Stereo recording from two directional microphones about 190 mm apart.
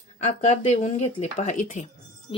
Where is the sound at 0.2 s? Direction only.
40° left (ahead or behind).